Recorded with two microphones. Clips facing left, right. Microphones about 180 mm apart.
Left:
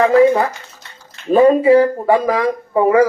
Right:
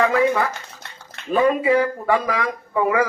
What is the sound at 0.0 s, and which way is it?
A man's voice, 35° left (ahead or behind).